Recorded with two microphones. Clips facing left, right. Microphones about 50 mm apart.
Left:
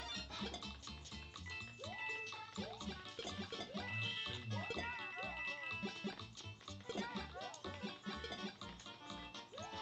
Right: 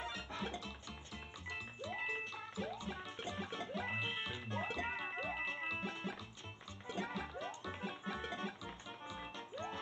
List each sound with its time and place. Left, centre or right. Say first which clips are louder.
0.0 s music: right 4 dB; centre
1.5 s music: right 5 dB; right
2.0 s music: right 4 dB; centre
6.9 s music: right 3 dB; right
7.3 s music: right 4 dB; centre